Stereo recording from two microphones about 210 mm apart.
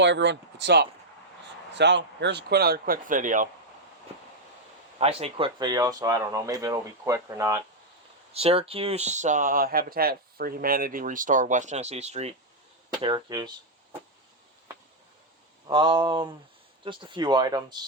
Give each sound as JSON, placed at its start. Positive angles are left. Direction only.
{"t": 0.0, "sound": "a man's voice", "side_deg": -55}
{"t": 4.9, "sound": "speech", "side_deg": -30}
{"t": 8.3, "sound": "speech", "side_deg": -30}
{"t": 15.7, "sound": "speech", "side_deg": -25}